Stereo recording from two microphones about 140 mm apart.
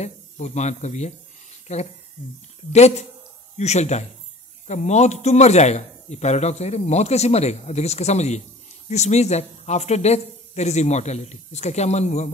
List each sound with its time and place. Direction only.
0.0 s a man's voice: 55° left (ahead or behind)